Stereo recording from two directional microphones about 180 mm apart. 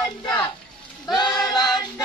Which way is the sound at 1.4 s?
25° left (ahead or behind).